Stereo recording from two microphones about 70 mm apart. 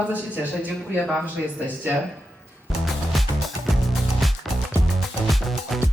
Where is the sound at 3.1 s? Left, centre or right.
Centre.